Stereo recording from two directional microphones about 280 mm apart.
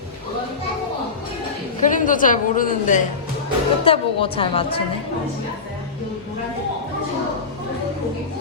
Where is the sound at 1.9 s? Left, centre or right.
Left.